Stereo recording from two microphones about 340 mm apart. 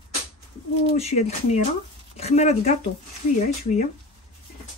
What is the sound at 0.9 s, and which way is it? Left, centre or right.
Speech, centre.